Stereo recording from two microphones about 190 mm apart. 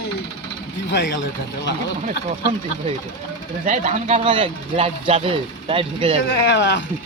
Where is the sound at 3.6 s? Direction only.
40° right (ahead or behind).